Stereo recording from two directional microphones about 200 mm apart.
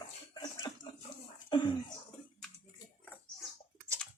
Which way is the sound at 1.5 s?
25° left (ahead or behind).